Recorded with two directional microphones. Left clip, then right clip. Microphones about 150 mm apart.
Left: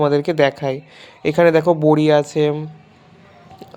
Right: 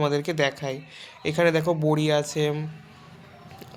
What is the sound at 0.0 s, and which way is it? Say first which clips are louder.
Speech: left 9 dB; 40° left (ahead or behind).